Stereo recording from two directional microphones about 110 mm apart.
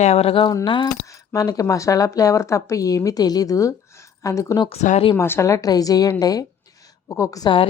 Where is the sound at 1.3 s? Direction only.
30° left (ahead or behind).